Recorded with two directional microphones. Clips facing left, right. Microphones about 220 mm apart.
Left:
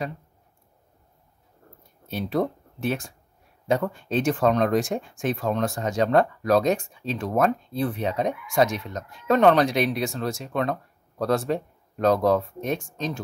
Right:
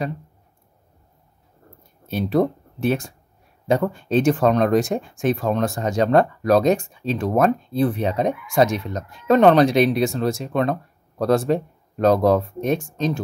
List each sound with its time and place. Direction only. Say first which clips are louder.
2.0 s speech: right 6 dB; 35° right (ahead or behind)
4.4 s speech: right 4 dB; 45° right (ahead or behind)